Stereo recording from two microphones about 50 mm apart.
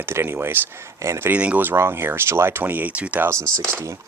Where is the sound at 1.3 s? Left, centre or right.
Right.